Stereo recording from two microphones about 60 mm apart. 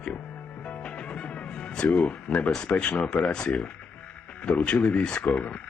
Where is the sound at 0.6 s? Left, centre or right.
Centre.